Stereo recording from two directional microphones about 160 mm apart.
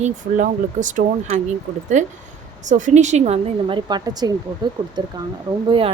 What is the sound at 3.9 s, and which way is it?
Speech, 25° right (ahead or behind).